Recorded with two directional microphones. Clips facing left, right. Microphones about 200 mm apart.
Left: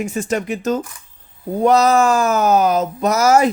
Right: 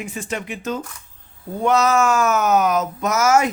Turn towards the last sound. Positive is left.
turn(degrees=35)  # may be behind; listen again after turning